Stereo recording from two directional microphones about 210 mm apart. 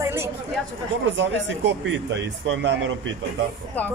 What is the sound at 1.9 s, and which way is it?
Speech, 60° right (ahead or behind).